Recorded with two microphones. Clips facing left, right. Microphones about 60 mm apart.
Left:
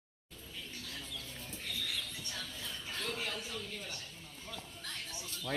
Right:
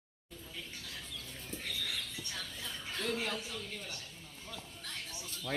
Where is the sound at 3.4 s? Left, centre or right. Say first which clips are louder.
Even; centre.